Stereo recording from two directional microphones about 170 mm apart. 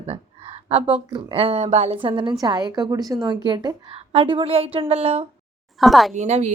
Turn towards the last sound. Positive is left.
turn(degrees=-45)  # may be behind; listen again after turning